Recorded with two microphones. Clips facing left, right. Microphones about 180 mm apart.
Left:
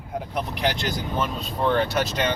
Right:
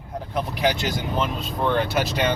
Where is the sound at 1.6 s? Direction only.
5° right (ahead or behind).